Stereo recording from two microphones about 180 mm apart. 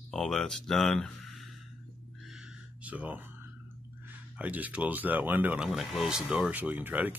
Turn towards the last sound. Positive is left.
turn(degrees=-10)  # may be behind; listen again after turning